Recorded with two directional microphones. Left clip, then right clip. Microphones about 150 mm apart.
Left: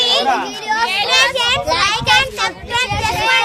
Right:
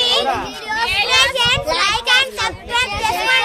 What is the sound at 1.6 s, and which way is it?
Children playing, 15° left (ahead or behind).